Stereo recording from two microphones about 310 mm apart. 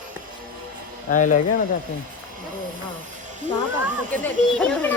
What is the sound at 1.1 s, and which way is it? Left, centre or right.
Speech, left.